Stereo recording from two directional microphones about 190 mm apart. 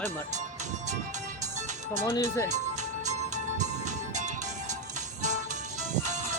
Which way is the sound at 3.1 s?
40° right (ahead or behind).